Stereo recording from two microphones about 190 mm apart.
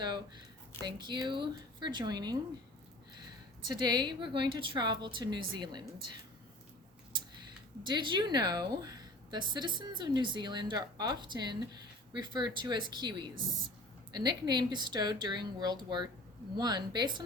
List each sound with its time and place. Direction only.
0.0 s a sound: 25° right (ahead or behind)
0.9 s a woman's voice: 25° right (ahead or behind)
3.7 s a woman's voice: 20° right (ahead or behind)
7.9 s a woman's voice: 25° right (ahead or behind)